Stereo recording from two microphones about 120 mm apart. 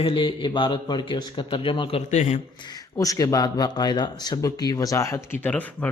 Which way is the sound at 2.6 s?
30° left (ahead or behind).